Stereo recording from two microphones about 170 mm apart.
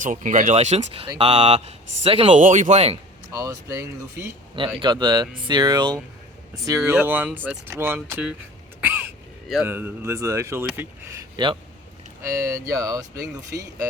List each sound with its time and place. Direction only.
0.0 s speech: 50° right (ahead or behind)
1.0 s speech: 30° right (ahead or behind)
2.4 s speech: 45° right (ahead or behind)
3.3 s speech: 20° right (ahead or behind)
8.8 s a sound: 10° right (ahead or behind)
9.6 s speech: 15° right (ahead or behind)